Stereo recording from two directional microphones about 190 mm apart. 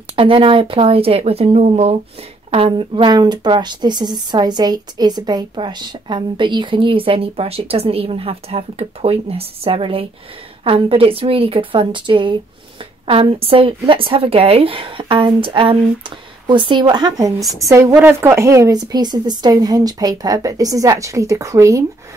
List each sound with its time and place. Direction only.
0.1 s a woman's voice: 30° right (ahead or behind)